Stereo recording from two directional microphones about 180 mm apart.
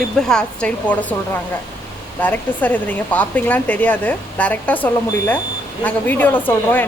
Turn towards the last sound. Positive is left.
turn(degrees=10)  # may be behind; listen again after turning